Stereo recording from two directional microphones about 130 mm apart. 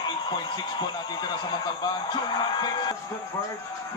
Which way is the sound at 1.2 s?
35° left (ahead or behind).